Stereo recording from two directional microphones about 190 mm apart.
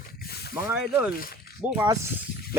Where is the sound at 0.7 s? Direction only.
10° right (ahead or behind).